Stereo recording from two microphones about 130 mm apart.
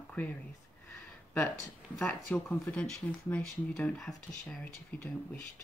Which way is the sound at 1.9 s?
5° left (ahead or behind).